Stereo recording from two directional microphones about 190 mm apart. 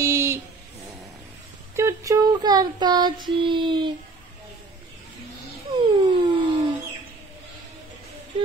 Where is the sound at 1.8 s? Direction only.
15° right (ahead or behind).